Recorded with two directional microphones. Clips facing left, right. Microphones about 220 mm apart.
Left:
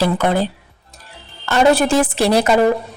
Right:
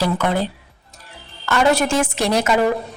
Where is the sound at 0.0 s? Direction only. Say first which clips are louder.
Left 3 dB; 35° left (ahead or behind).